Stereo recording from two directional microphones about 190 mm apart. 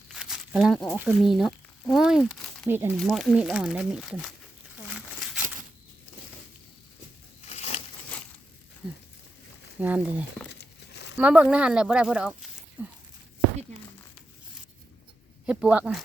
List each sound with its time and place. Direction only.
0.1 s a sound: 5° right (ahead or behind)
0.9 s speech: 5° right (ahead or behind)
3.0 s speech: centre (ahead or behind)
4.9 s a sound: 5° right (ahead or behind)
7.4 s a sound: 35° left (ahead or behind)
9.8 s speech: 10° right (ahead or behind)
10.5 s crumpling: 65° left (ahead or behind)
11.2 s speech: 5° right (ahead or behind)
15.4 s speech: 5° right (ahead or behind)